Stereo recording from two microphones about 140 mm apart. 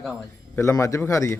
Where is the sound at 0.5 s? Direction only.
20° left (ahead or behind).